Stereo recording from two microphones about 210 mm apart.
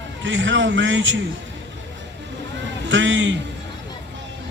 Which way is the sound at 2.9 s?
60° right (ahead or behind).